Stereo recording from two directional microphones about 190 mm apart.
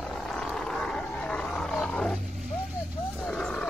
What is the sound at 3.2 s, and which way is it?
Roaring cats, 5° left (ahead or behind).